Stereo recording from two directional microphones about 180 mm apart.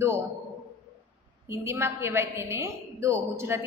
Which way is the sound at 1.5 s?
15° right (ahead or behind).